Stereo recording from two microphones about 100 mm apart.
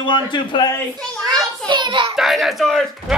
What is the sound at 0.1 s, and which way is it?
Speech, 50° left (ahead or behind).